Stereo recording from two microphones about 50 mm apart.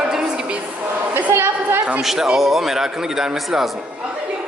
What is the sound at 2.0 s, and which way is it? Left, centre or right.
A woman's voice, centre.